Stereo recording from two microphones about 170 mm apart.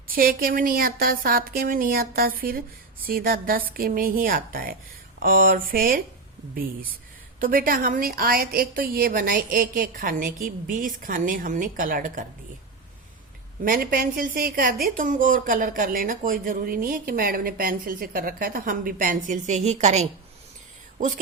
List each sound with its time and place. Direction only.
0.1 s a woman's voice: 60° right (ahead or behind)
7.3 s a woman's voice: 55° right (ahead or behind)
13.7 s a woman's voice: 60° right (ahead or behind); by 20.1 s 40° right (ahead or behind)